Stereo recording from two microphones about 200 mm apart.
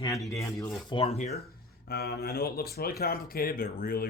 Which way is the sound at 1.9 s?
50° left (ahead or behind).